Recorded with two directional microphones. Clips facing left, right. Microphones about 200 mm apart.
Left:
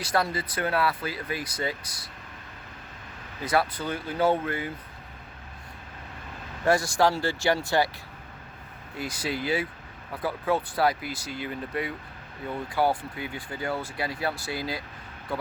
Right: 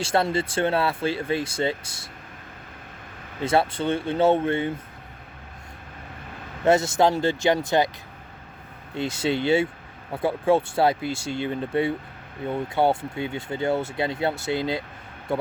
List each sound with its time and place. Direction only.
0.0 s speech: 25° right (ahead or behind)
3.4 s speech: 25° right (ahead or behind)
6.7 s speech: 20° right (ahead or behind)
9.0 s speech: 25° right (ahead or behind)